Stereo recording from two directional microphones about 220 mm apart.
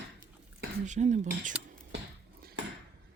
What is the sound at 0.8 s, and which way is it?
Speech, 35° right (ahead or behind).